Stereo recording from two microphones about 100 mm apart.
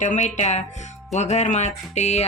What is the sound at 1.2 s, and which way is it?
Speech, 90° left.